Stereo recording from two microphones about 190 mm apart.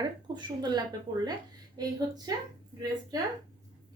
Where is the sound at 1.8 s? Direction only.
20° right (ahead or behind).